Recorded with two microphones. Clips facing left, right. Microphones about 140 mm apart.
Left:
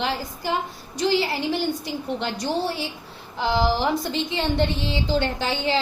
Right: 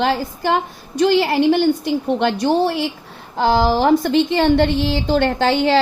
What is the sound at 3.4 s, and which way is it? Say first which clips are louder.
Speech: right 6 dB; 55° right (ahead or behind).